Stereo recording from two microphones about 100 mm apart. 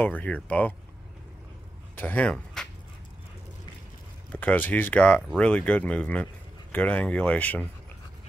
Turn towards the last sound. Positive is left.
turn(degrees=15)  # may be behind; listen again after turning